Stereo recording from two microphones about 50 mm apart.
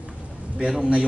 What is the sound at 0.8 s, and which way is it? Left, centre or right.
Speech, centre.